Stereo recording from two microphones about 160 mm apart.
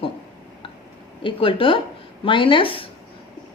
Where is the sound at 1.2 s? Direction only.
35° left (ahead or behind).